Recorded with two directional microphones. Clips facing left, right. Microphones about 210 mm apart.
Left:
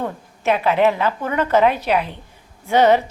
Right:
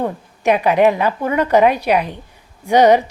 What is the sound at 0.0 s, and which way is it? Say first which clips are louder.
A woman's voice: right 4 dB; 15° right (ahead or behind).